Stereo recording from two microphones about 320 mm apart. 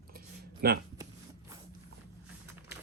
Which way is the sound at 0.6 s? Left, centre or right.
Right.